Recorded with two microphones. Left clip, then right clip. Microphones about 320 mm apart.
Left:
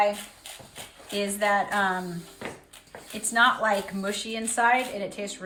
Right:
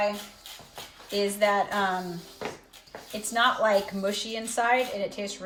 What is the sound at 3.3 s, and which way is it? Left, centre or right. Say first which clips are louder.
A woman's voice: left 1 dB; centre.